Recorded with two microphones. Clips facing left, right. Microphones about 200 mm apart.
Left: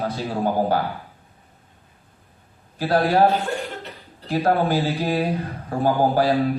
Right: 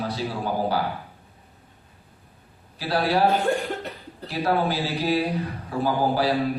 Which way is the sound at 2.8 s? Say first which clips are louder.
Left 4 dB; 45° left (ahead or behind).